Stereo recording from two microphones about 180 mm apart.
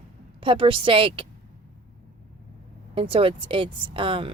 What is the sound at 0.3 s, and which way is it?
Speech, 30° right (ahead or behind).